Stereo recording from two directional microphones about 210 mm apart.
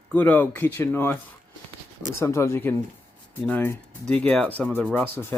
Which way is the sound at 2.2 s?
10° left (ahead or behind).